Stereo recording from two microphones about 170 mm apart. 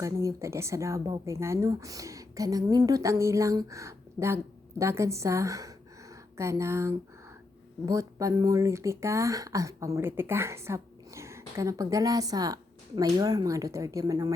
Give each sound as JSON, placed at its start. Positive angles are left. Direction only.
{"t": 0.0, "sound": "a woman's voice", "side_deg": -20}